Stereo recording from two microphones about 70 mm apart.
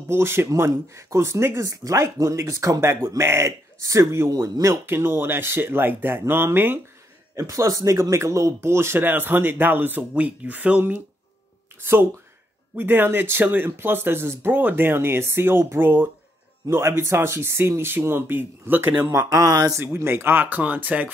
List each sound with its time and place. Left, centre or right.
0.1 s speech: right
4.8 s speech: right
7.3 s speech: right
11.8 s speech: right
19.0 s speech: right
19.8 s speech: right